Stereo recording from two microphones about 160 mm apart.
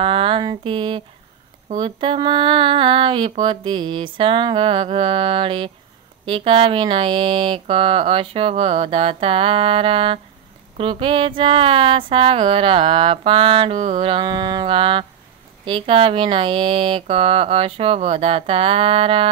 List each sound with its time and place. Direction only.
0.0 s a sound: 35° right (ahead or behind)
1.8 s mantra: 30° right (ahead or behind)
13.9 s mantra: 30° right (ahead or behind)